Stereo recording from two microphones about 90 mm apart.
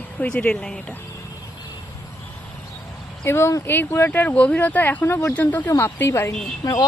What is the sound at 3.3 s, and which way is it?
Speech, 30° left (ahead or behind).